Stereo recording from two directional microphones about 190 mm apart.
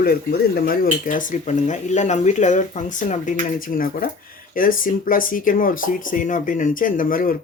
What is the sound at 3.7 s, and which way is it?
Speech, 50° left (ahead or behind).